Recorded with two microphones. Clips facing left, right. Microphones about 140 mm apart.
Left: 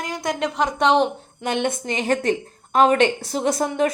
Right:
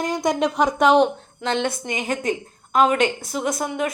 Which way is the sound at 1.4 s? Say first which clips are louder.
Even; 15° left (ahead or behind).